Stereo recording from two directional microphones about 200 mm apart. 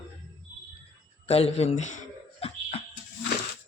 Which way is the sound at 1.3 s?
30° left (ahead or behind).